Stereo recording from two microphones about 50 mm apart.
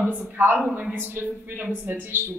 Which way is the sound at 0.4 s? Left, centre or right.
Right.